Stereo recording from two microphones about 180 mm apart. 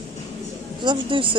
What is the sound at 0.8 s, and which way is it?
Speech, 25° right (ahead or behind).